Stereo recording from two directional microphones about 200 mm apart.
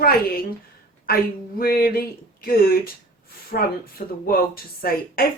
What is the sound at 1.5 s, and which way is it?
Speech, 50° left (ahead or behind).